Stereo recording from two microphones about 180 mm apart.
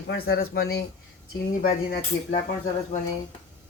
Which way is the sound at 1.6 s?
50° left (ahead or behind).